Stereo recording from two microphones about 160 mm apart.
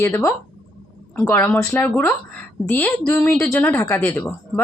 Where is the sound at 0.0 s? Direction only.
15° left (ahead or behind).